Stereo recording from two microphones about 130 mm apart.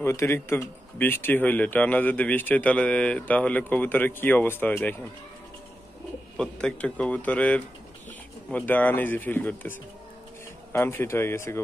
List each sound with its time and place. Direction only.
0.0 s speech: 20° left (ahead or behind)
6.3 s speech: 5° left (ahead or behind)